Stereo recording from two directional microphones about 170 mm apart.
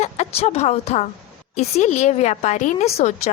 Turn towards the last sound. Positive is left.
turn(degrees=40)  # may be behind; listen again after turning